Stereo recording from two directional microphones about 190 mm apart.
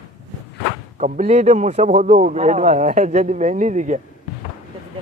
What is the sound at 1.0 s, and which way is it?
Speech, 35° right (ahead or behind).